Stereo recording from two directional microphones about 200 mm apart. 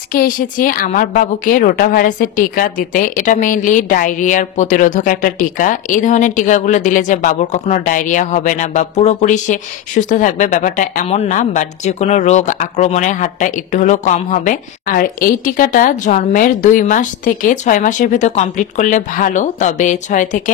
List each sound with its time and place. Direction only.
0.1 s a woman's voice: 45° left (ahead or behind)